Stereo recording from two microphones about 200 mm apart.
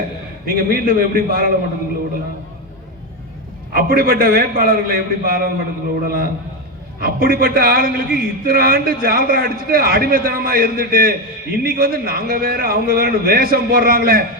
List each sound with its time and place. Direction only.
0.4 s a man's voice: 45° right (ahead or behind)
3.7 s a man's voice: 45° right (ahead or behind)